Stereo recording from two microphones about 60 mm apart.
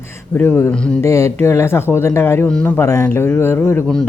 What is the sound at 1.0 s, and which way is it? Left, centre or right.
Speech, left.